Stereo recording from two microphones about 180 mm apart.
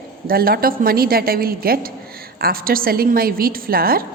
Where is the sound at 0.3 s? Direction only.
55° right (ahead or behind).